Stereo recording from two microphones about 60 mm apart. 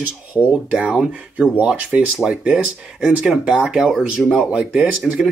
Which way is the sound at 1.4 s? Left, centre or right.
Right.